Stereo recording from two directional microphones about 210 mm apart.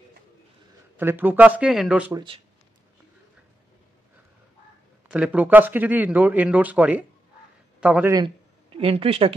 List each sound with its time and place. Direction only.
0.9 s speech: 10° right (ahead or behind)
2.1 s speech: 25° right (ahead or behind)
5.0 s a man's voice: 5° right (ahead or behind)
8.7 s speech: 25° right (ahead or behind)